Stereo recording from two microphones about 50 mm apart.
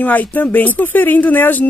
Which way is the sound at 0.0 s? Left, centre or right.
Left.